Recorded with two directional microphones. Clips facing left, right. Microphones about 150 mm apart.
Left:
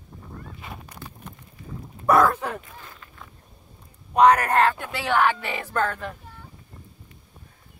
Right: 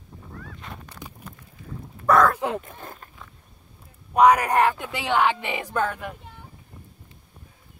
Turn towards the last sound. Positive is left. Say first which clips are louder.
# even
turn(degrees=-10)  # may be behind; listen again after turning